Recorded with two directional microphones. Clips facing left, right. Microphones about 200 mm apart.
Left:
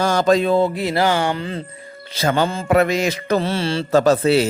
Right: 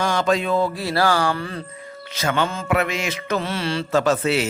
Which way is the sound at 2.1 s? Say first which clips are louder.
Left 4 dB; 35° left (ahead or behind).